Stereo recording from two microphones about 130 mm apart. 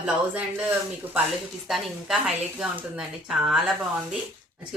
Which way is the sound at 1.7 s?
Centre (ahead or behind).